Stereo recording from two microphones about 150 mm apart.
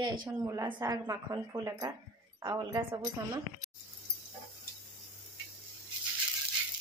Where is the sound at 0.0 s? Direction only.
30° right (ahead or behind).